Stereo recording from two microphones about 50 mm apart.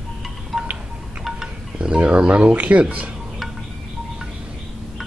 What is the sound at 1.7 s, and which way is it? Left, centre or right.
Speech, right.